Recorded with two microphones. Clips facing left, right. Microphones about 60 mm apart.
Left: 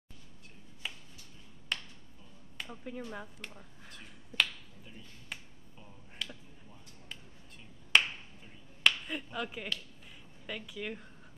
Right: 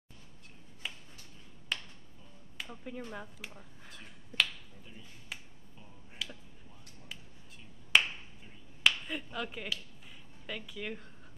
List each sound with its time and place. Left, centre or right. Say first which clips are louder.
0.8 s a sound: even; centre
1.7 s finger snapping: even; centre
2.5 s a sound: left 1 dB; centre
3.1 s finger snapping: even; centre
7.9 s finger snapping: even; centre
8.8 s speech: even; centre